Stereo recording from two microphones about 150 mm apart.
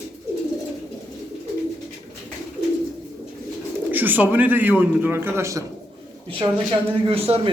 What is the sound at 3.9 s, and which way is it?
A man's voice, 10° right (ahead or behind).